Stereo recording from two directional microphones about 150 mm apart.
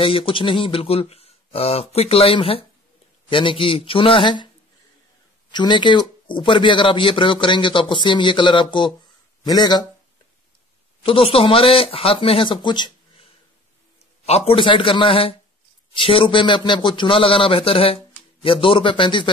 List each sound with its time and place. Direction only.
0.0 s speech: 40° left (ahead or behind)
5.5 s speech: 30° left (ahead or behind)
11.0 s speech: 40° left (ahead or behind)
14.2 s speech: 45° left (ahead or behind)